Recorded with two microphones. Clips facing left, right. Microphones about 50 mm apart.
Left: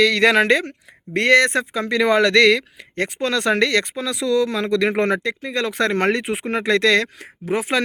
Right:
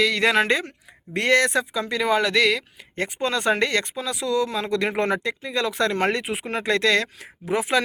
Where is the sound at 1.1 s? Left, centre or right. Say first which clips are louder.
Left 4 dB; left.